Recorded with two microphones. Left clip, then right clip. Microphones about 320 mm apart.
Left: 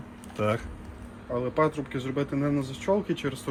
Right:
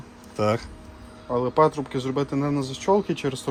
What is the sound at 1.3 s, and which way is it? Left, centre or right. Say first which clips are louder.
Speech: right 6 dB; right.